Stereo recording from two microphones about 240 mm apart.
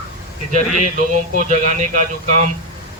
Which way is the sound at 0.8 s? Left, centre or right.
Right.